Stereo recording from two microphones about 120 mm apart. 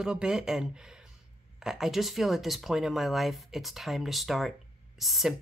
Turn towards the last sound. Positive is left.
turn(degrees=0)  # may be behind; listen again after turning